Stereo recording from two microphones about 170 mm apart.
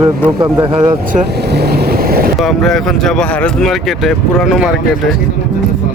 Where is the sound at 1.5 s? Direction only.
70° right (ahead or behind).